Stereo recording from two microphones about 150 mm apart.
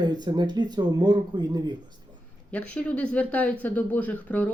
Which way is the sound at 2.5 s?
10° left (ahead or behind).